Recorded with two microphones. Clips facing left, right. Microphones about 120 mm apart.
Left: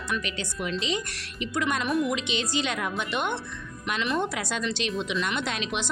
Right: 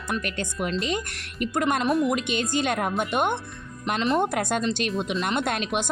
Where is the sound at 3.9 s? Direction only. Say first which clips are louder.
Right 4 dB; 35° right (ahead or behind).